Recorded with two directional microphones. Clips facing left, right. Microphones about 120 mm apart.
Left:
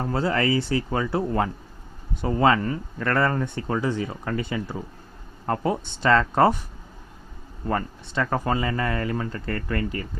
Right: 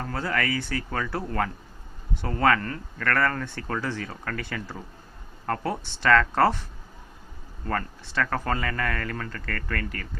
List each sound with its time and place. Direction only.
0.0 s speech: 25° left (ahead or behind)